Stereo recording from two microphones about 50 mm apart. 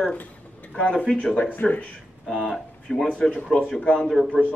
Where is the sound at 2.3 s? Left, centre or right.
Centre.